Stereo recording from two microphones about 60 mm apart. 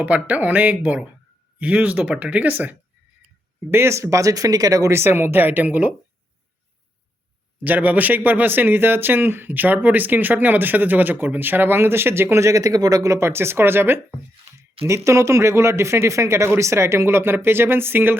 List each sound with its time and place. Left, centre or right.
0.0 s speech: right
3.7 s speech: right
4.9 s a man's voice: right
7.6 s a man's voice: right
12.6 s speech: right
13.1 s speech: right
14.8 s speech: right